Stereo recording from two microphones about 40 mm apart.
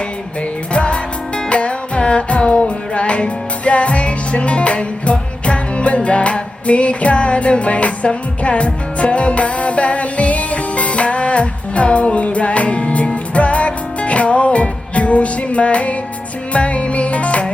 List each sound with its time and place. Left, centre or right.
0.7 s music: left